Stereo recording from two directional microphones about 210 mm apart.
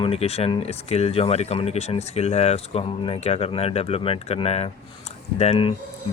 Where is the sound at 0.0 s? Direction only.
30° left (ahead or behind).